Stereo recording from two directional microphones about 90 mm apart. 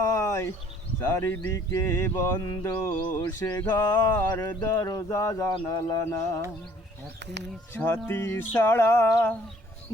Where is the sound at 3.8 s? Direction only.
40° left (ahead or behind).